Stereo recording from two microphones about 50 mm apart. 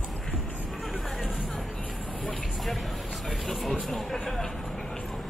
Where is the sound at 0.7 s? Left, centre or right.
Centre.